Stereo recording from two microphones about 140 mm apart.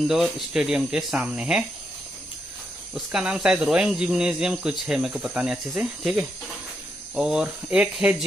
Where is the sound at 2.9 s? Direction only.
5° right (ahead or behind).